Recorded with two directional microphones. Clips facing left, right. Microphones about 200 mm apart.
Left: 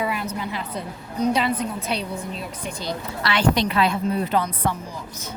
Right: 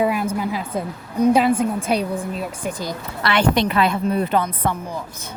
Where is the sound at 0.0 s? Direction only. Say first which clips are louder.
Right 6 dB; 50° right (ahead or behind).